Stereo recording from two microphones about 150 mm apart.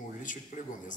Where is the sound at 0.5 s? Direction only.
60° left (ahead or behind).